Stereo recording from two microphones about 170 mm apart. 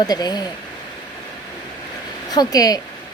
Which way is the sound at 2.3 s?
20° left (ahead or behind).